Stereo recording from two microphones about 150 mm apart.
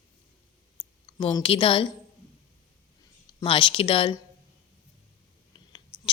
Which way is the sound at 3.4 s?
35° left (ahead or behind).